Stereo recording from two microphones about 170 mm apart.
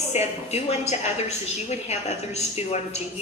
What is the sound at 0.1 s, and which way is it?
A woman's voice, 40° left (ahead or behind).